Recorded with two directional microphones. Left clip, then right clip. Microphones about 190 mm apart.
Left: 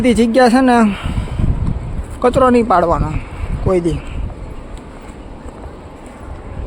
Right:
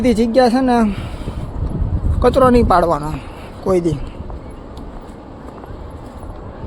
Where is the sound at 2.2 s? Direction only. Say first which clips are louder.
Even; 5° left (ahead or behind).